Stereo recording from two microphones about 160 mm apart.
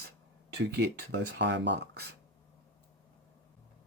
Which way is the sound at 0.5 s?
90° right.